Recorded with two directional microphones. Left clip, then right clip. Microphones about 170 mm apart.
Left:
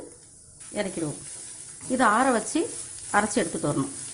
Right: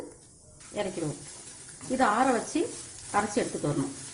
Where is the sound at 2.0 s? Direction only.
45° left (ahead or behind).